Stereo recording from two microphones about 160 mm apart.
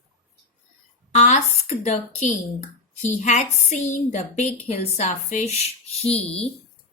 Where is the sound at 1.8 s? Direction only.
45° left (ahead or behind).